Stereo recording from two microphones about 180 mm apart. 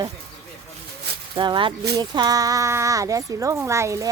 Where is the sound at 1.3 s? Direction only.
25° right (ahead or behind).